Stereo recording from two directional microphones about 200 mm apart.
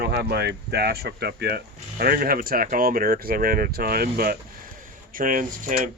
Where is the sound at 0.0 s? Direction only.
55° right (ahead or behind).